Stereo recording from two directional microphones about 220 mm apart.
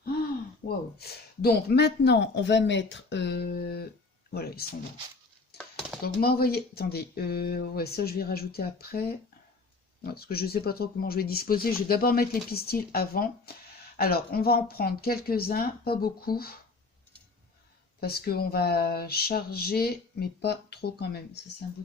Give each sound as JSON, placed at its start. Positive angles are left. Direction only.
{"t": 0.9, "sound": "speech", "side_deg": 45}
{"t": 5.5, "sound": "a sound", "side_deg": 0}
{"t": 6.0, "sound": "speech", "side_deg": 45}
{"t": 18.0, "sound": "speech", "side_deg": 45}